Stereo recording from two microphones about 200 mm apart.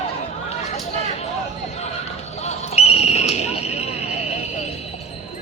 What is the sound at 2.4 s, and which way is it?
Basketball bounce, 35° left (ahead or behind).